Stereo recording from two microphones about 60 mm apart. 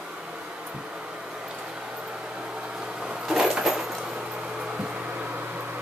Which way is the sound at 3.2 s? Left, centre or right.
Centre.